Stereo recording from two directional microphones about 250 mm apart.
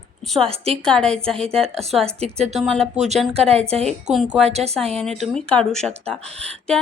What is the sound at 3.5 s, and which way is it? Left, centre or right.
Speech, right.